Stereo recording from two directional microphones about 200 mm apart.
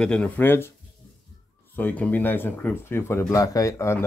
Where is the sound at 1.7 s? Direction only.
10° left (ahead or behind).